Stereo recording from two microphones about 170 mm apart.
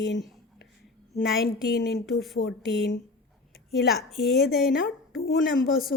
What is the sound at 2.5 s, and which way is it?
Speech, 90° left.